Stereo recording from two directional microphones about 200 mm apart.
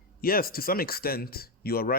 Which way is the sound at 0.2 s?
50° left (ahead or behind).